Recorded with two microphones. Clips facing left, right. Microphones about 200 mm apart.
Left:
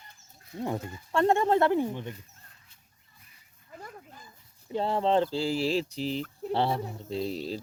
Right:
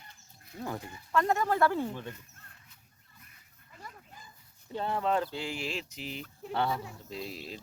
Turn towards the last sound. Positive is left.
turn(degrees=35)  # may be behind; listen again after turning